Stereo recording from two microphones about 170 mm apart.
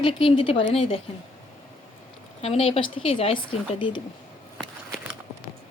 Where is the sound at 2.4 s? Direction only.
35° left (ahead or behind).